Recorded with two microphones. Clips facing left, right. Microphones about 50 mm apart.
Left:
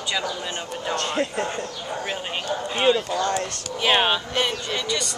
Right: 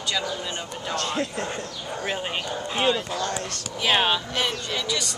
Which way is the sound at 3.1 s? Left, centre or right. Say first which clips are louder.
Left 5 dB; left.